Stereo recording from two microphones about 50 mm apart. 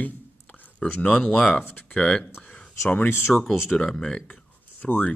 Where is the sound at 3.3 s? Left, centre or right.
Centre.